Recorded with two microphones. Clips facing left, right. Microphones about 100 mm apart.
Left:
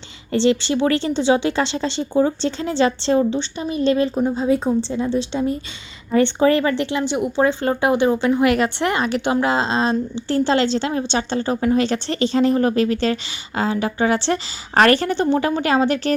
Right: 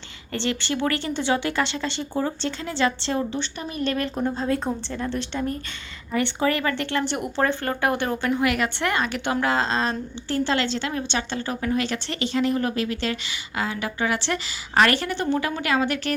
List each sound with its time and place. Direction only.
0.3 s a woman's voice: 25° left (ahead or behind)
4.2 s a woman's voice: 10° left (ahead or behind)
6.1 s a woman's voice: 30° left (ahead or behind)
7.1 s a woman's voice: 10° left (ahead or behind); by 16.1 s 30° left (ahead or behind)